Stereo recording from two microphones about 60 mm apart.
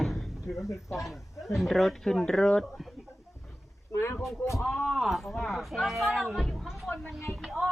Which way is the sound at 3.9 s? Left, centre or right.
Left.